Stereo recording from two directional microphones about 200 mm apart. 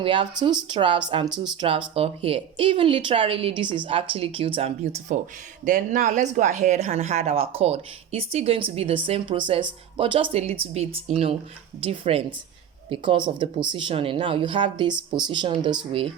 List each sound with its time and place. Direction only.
0.0 s speech: 25° right (ahead or behind)